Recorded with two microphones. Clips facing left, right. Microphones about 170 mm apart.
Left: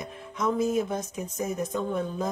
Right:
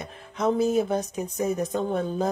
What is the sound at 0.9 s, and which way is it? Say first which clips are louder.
Speech: right 5 dB; 65° right (ahead or behind).